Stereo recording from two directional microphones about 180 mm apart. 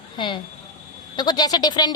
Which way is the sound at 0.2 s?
25° left (ahead or behind).